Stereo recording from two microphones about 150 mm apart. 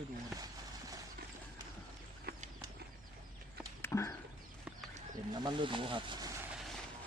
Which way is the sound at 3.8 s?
20° left (ahead or behind).